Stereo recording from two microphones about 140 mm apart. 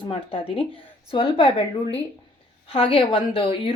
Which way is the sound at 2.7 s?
40° left (ahead or behind).